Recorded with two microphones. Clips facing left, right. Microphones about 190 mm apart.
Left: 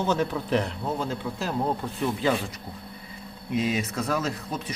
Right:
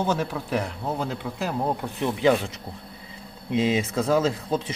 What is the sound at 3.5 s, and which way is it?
Speech, 25° right (ahead or behind).